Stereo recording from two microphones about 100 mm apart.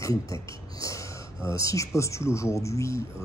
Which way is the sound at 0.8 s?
30° left (ahead or behind).